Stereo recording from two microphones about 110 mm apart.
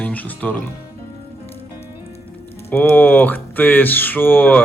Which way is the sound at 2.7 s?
20° left (ahead or behind).